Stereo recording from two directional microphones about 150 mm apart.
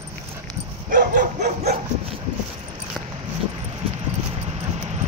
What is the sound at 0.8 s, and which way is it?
Bow-wow, 65° right (ahead or behind).